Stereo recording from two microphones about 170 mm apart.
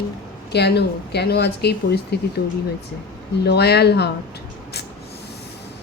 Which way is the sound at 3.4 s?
75° left (ahead or behind).